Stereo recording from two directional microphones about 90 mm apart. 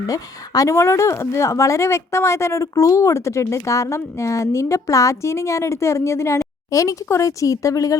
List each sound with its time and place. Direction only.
0.1 s speech: 40° left (ahead or behind)